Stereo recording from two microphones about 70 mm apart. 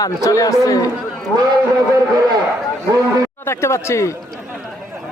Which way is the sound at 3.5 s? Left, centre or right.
Left.